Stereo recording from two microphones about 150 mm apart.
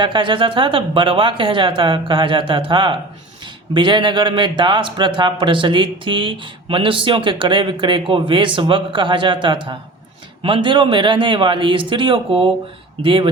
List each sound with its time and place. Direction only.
0.0 s a man's voice: 30° right (ahead or behind)